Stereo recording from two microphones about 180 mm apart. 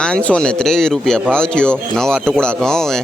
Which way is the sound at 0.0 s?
5° left (ahead or behind).